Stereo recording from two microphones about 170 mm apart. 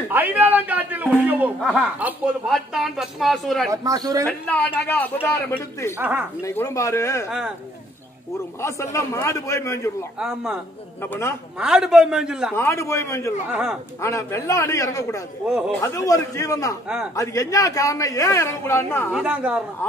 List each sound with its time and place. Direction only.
0.1 s a man's voice: 10° right (ahead or behind)
3.7 s a woman's voice: 20° right (ahead or behind)
4.3 s a man's voice: 10° left (ahead or behind)
5.9 s speech: 10° right (ahead or behind)
6.4 s a man's voice: 20° left (ahead or behind)
7.2 s speech: 5° right (ahead or behind)
8.5 s a man's voice: 15° left (ahead or behind)
10.1 s speech: 5° right (ahead or behind)
11.0 s a man's voice: 15° left (ahead or behind)
11.6 s speech: 5° right (ahead or behind)
12.5 s a man's voice: 15° left (ahead or behind)
13.5 s speech: 5° right (ahead or behind)
14.0 s a woman's voice: 15° left (ahead or behind)
19.1 s speech: 10° right (ahead or behind)